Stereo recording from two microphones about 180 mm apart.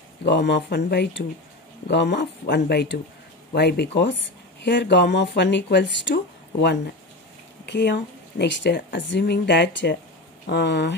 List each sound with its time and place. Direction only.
0.2 s a woman's voice: 75° left (ahead or behind)
7.6 s a woman's voice: 70° left (ahead or behind)